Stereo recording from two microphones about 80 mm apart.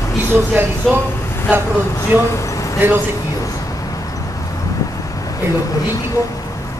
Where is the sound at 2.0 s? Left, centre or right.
Left.